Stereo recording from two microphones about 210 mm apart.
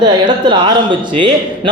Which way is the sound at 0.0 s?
20° right (ahead or behind).